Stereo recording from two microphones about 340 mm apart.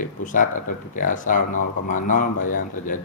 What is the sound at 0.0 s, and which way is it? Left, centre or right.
Speech, left.